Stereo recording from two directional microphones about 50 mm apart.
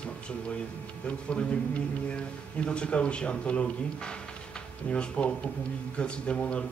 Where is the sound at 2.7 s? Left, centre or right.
Left.